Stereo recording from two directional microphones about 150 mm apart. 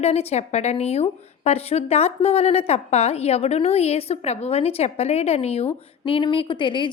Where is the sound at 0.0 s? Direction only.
45° left (ahead or behind).